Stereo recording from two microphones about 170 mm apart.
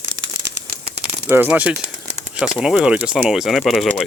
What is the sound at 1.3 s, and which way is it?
Speech, 10° right (ahead or behind).